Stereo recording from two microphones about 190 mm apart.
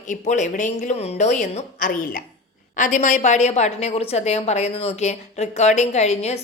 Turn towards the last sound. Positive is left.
turn(degrees=35)  # may be behind; listen again after turning